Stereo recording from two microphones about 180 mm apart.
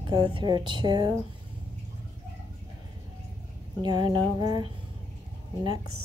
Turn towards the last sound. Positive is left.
turn(degrees=-20)  # may be behind; listen again after turning